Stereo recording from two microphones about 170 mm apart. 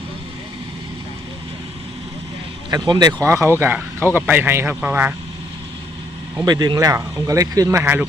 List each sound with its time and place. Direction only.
2.6 s speech: 25° right (ahead or behind)
6.4 s speech: 25° right (ahead or behind)